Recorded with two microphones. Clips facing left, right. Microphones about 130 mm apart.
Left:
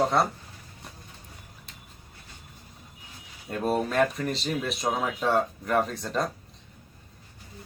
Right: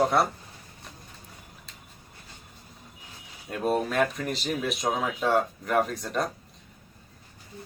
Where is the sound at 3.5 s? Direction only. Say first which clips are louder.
Even; centre (ahead or behind).